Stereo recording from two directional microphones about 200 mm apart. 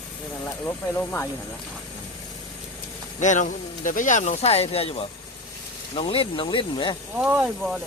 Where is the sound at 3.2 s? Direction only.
40° left (ahead or behind).